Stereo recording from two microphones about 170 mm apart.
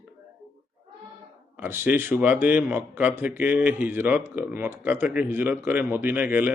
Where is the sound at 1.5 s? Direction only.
10° right (ahead or behind).